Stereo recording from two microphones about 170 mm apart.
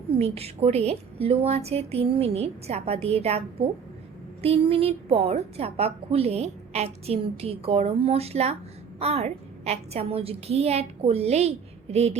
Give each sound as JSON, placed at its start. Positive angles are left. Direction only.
{"t": 0.2, "sound": "a woman's voice", "side_deg": -35}